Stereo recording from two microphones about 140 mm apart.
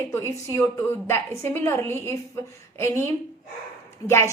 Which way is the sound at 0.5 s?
20° left (ahead or behind).